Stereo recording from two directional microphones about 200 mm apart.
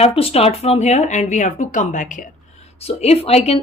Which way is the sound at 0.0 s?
30° left (ahead or behind).